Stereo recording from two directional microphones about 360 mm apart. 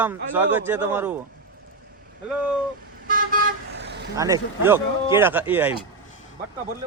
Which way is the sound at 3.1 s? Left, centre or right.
Right.